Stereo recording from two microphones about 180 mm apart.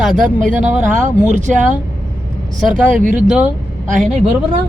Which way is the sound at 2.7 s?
50° right (ahead or behind).